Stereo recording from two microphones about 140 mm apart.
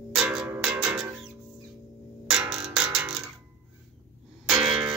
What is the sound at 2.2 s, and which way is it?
Music, 5° right (ahead or behind).